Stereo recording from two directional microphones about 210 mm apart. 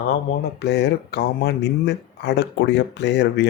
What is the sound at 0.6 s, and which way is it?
Speech, 55° left (ahead or behind).